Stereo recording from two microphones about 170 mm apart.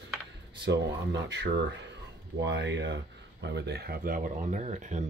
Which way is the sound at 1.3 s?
90° right.